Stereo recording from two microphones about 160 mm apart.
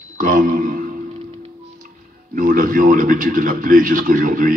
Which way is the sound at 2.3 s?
60° right (ahead or behind).